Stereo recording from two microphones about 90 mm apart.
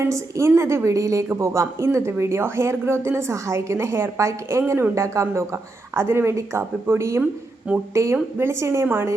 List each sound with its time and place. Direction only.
0.0 s a woman's voice: 30° right (ahead or behind)
7.7 s speech: 15° right (ahead or behind)
8.1 s a woman's voice: 30° right (ahead or behind)